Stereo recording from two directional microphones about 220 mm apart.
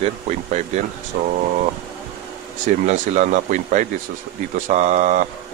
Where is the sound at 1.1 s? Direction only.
40° right (ahead or behind).